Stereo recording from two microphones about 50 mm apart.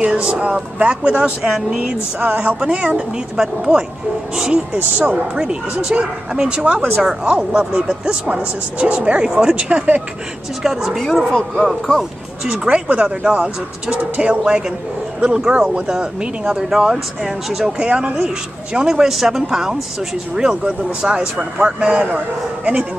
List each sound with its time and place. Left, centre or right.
0.0 s speech: right
3.3 s speech: centre
4.7 s speech: right
10.6 s speech: centre
12.6 s speech: right
17.7 s speech: right